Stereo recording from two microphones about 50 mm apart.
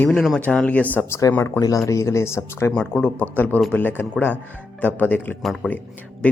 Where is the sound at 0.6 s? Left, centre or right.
Left.